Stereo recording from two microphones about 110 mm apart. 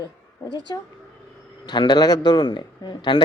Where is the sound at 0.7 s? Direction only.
35° left (ahead or behind).